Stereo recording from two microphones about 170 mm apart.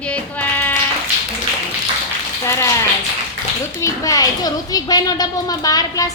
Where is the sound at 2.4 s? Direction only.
15° left (ahead or behind).